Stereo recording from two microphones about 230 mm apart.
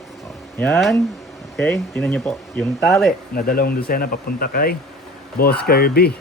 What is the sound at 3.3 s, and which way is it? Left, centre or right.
Speech, left.